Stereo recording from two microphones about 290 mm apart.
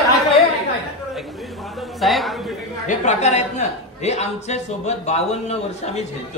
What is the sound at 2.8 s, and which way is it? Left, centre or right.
A man's voice, left.